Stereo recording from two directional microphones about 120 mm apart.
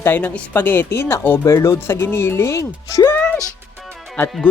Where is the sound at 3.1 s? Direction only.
10° left (ahead or behind).